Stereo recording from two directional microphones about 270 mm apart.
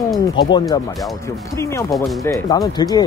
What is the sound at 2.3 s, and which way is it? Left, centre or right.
Speech, centre.